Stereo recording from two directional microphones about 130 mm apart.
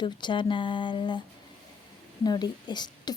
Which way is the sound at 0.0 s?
35° left (ahead or behind).